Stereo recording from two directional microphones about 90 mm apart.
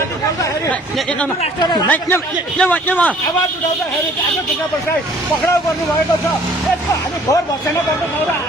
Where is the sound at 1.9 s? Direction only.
25° left (ahead or behind).